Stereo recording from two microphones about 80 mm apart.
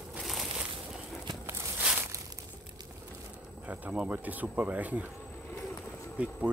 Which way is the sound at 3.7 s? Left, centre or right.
Centre.